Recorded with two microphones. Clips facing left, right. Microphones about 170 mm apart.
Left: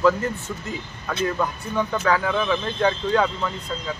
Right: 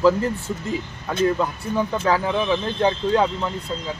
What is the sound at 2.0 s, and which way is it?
Speech, 25° right (ahead or behind).